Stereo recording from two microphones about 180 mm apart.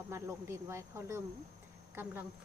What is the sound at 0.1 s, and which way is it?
Speech, 15° right (ahead or behind).